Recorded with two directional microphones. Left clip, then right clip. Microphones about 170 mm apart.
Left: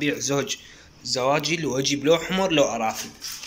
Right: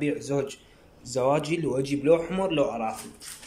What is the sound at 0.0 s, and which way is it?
Speech, 5° right (ahead or behind).